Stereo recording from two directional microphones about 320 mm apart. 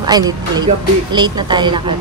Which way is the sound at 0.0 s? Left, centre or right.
Centre.